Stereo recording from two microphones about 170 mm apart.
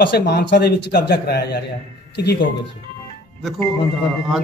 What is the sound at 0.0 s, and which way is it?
A man's voice, 70° left (ahead or behind).